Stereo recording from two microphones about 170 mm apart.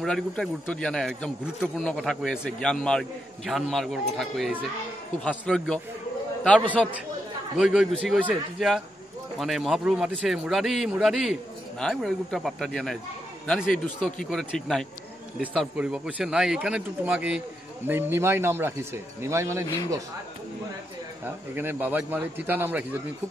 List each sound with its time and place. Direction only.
0.0 s speech: 5° left (ahead or behind)
7.5 s speech: 5° right (ahead or behind)
21.2 s speech: 10° right (ahead or behind)